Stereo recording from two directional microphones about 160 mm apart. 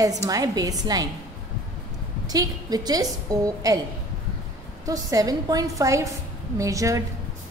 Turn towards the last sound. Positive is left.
turn(degrees=-20)  # may be behind; listen again after turning